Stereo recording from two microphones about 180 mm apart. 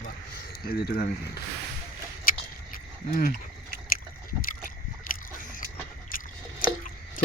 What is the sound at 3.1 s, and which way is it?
Speech, 50° left (ahead or behind).